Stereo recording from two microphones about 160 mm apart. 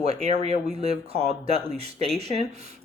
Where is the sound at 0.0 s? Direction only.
40° right (ahead or behind).